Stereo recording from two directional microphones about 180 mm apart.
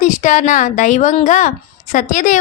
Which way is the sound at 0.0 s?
45° left (ahead or behind).